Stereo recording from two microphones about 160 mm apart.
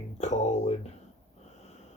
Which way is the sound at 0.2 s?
45° left (ahead or behind).